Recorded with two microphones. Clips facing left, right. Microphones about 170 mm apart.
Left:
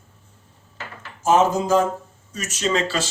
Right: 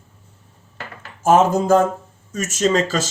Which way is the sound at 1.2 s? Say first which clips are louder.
Right 3 dB; 55° right (ahead or behind).